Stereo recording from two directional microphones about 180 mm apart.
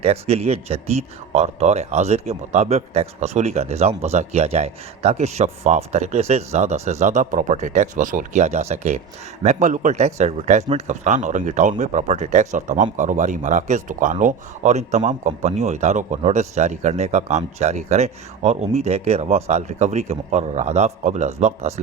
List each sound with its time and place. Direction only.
0.0 s speech: 35° right (ahead or behind)